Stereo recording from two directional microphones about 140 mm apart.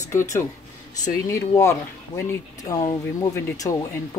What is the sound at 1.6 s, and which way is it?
Speech, 20° left (ahead or behind).